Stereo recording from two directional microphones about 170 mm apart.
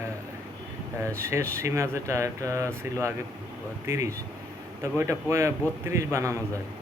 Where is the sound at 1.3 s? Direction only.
15° right (ahead or behind).